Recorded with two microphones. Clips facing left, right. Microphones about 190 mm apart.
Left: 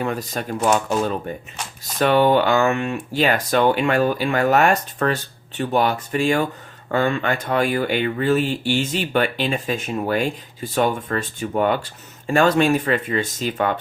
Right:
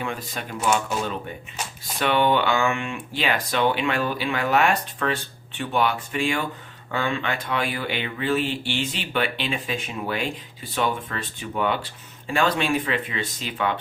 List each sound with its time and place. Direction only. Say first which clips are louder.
0.0 s speech: left 6 dB; 40° left (ahead or behind)